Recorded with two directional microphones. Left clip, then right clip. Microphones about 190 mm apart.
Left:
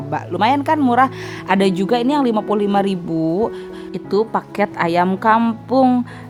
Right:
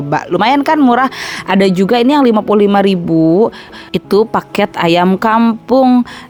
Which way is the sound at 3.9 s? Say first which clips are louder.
Right 7 dB; 35° right (ahead or behind).